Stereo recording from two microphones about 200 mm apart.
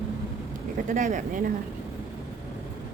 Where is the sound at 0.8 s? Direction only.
40° right (ahead or behind).